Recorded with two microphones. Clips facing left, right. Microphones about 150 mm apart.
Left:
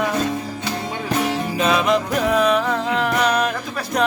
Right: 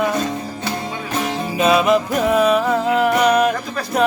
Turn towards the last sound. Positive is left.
turn(degrees=-5)  # may be behind; listen again after turning